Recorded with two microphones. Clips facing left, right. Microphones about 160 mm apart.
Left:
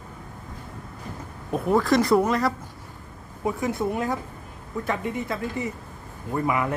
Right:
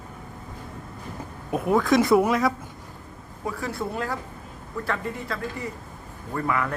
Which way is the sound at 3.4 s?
20° left (ahead or behind).